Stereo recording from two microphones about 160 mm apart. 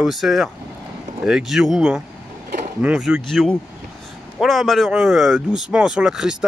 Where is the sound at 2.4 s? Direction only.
55° right (ahead or behind).